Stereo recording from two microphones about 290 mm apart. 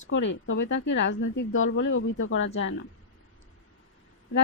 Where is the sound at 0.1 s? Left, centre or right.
Left.